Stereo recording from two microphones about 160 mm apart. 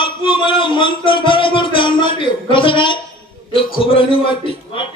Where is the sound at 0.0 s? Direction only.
30° left (ahead or behind).